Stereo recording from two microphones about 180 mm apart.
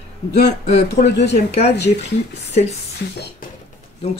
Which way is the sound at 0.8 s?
70° left (ahead or behind).